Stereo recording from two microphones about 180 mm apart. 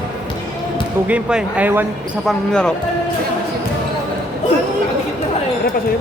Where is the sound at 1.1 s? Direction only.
5° right (ahead or behind).